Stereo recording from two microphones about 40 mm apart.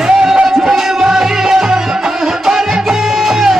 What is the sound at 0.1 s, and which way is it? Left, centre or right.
Music, centre.